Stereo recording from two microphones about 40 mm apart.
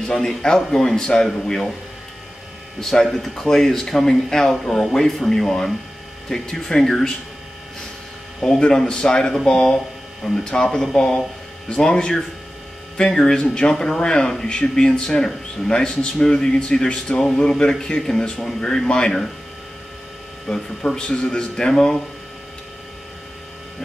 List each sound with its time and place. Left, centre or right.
0.0 s speech: centre
2.8 s speech: centre
8.4 s speech: centre
20.4 s speech: centre